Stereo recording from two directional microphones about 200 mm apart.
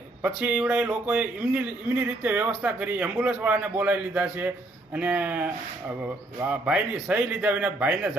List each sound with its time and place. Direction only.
0.2 s speech: 5° right (ahead or behind)